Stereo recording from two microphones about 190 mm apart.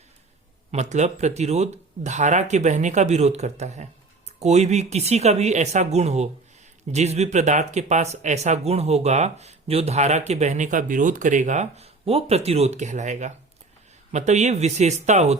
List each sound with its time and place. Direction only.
0.7 s speech: 35° right (ahead or behind)